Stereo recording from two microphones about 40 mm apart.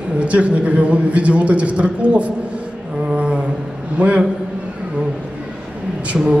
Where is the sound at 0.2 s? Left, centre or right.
Right.